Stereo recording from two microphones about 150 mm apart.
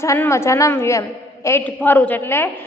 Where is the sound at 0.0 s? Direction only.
20° left (ahead or behind).